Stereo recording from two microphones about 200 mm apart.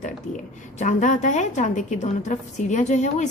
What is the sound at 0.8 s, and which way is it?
A woman's voice, 35° left (ahead or behind).